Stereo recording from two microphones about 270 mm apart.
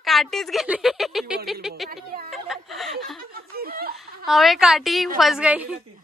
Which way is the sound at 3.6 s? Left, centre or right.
Right.